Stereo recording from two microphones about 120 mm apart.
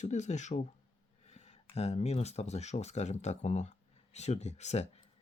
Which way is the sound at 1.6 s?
60° left (ahead or behind).